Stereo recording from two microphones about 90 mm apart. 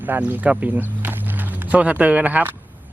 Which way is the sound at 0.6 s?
20° right (ahead or behind).